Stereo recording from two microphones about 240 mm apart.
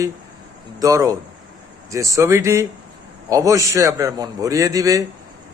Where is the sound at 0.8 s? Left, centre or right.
Centre.